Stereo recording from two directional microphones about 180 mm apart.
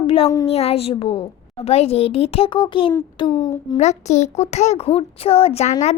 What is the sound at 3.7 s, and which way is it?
A woman's voice, 40° left (ahead or behind).